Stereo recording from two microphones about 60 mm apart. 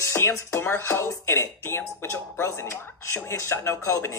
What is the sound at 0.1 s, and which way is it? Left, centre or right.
Speech, left.